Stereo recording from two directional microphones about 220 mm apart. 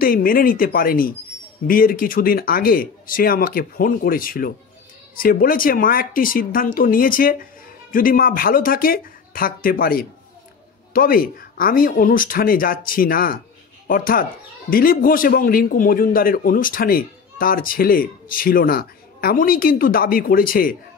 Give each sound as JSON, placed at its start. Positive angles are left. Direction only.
{"t": 0.0, "sound": "a man's voice", "side_deg": 40}